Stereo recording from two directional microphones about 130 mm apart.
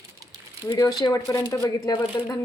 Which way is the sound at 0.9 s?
30° left (ahead or behind).